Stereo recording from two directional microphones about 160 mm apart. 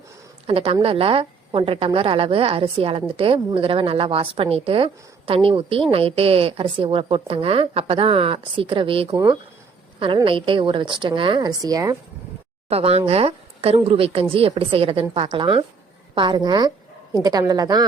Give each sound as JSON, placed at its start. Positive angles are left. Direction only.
{"t": 0.4, "sound": "a woman's voice", "side_deg": -35}
{"t": 12.6, "sound": "a woman's voice", "side_deg": -40}